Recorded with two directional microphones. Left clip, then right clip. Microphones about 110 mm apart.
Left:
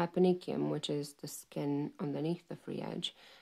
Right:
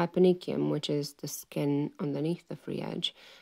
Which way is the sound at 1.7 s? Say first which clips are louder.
Right 5 dB; 40° right (ahead or behind).